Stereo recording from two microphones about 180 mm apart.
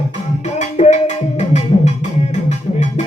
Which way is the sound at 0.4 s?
40° left (ahead or behind).